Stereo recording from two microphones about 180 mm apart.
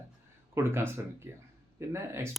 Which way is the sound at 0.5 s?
15° right (ahead or behind).